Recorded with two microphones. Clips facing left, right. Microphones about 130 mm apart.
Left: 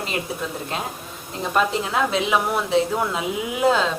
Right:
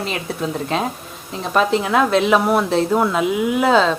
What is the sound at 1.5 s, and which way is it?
A woman's voice, 75° right (ahead or behind).